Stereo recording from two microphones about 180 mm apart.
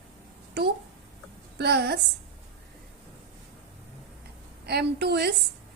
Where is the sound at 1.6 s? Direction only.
65° right (ahead or behind).